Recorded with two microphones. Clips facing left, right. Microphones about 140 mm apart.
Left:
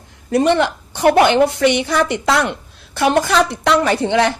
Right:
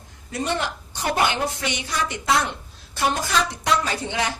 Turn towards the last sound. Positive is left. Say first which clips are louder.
# left 11 dB
turn(degrees=65)  # may be behind; listen again after turning